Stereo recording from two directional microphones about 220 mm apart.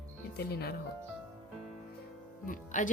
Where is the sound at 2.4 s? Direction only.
35° left (ahead or behind).